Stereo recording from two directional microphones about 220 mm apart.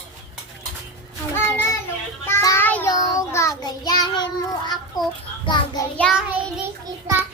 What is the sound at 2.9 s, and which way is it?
Child singing, 15° left (ahead or behind).